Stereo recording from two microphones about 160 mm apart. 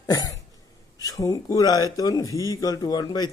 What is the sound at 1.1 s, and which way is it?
A man's voice, 20° left (ahead or behind).